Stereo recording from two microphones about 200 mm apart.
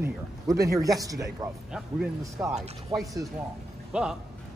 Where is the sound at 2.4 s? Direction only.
10° right (ahead or behind).